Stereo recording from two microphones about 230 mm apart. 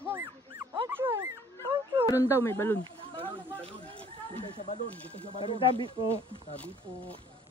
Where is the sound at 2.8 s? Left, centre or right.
Right.